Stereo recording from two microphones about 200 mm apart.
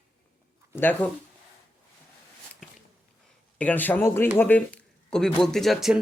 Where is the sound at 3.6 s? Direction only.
10° left (ahead or behind).